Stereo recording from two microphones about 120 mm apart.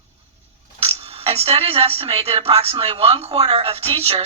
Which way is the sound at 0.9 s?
55° right (ahead or behind).